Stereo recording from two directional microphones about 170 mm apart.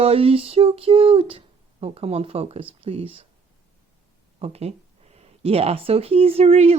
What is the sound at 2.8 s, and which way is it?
Speech, 35° right (ahead or behind).